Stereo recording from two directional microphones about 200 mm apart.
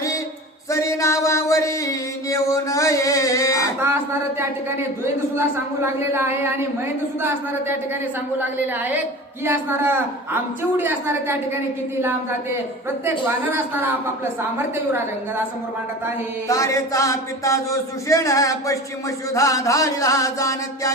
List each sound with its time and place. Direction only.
0.7 s music: 15° left (ahead or behind)
3.8 s a man's voice: 10° right (ahead or behind)
8.4 s a man's voice: 10° right (ahead or behind)
13.1 s a man's voice: 10° right (ahead or behind)
16.5 s speech: 15° left (ahead or behind)